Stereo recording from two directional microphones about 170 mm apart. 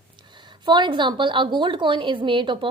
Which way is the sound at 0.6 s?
25° right (ahead or behind).